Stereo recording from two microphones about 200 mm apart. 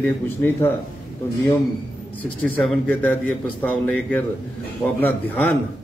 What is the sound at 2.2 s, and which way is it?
A man's voice, 5° left (ahead or behind).